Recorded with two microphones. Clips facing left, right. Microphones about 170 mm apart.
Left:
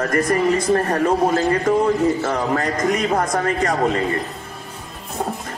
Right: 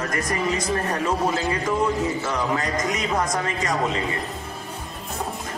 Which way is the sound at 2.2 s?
55° left (ahead or behind).